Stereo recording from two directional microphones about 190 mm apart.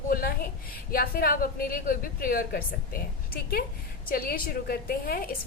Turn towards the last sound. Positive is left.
turn(degrees=50)  # may be behind; listen again after turning